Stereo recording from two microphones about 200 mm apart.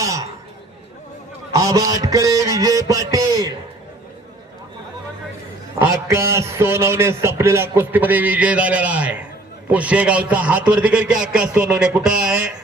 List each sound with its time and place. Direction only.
0.0 s chatter: 15° right (ahead or behind)
1.5 s a man's voice: 15° right (ahead or behind)
5.8 s a man's voice: 15° right (ahead or behind)
11.3 s music: 5° right (ahead or behind)